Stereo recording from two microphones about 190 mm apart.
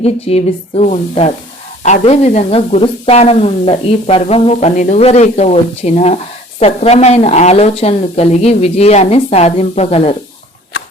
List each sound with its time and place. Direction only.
0.0 s speech: 30° left (ahead or behind)